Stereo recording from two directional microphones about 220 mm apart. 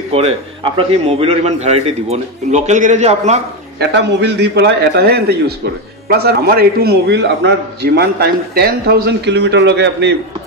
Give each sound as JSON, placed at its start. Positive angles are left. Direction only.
{"t": 0.1, "sound": "a man's voice", "side_deg": -25}
{"t": 3.8, "sound": "a man's voice", "side_deg": -50}